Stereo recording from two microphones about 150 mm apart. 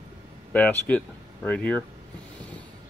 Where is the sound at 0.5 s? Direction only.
10° left (ahead or behind).